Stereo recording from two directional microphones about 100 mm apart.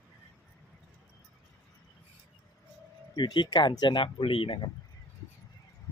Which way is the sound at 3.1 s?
50° left (ahead or behind).